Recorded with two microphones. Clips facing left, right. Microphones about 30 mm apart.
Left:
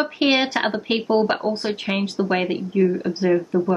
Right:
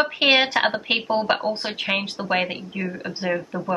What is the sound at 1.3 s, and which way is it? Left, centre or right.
A woman's voice, right.